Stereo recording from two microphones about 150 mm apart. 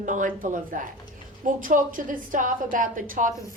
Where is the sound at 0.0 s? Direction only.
60° right (ahead or behind).